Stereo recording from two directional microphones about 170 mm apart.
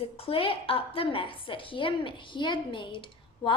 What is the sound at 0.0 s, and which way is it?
A woman's voice, 35° left (ahead or behind).